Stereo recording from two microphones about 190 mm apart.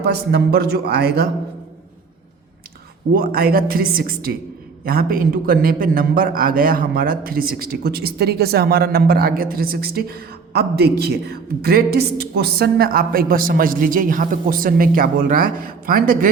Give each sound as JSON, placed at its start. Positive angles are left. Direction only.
{"t": 0.0, "sound": "a man's voice", "side_deg": -60}
{"t": 3.1, "sound": "a man's voice", "side_deg": -50}